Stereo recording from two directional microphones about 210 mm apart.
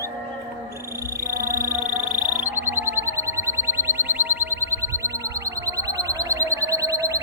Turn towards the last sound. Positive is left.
turn(degrees=-15)  # may be behind; listen again after turning